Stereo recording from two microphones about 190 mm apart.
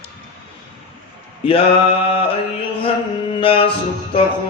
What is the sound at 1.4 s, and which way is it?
Speech, 25° left (ahead or behind).